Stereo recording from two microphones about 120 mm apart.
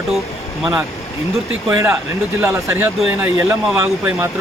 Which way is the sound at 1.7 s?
25° right (ahead or behind).